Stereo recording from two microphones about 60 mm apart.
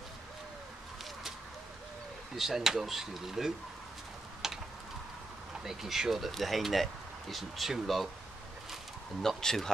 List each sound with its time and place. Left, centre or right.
2.3 s speech: centre
4.4 s a sound: centre
5.6 s speech: centre
9.2 s speech: centre